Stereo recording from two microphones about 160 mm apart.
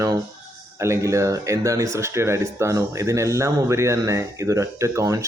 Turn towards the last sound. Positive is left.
turn(degrees=-20)  # may be behind; listen again after turning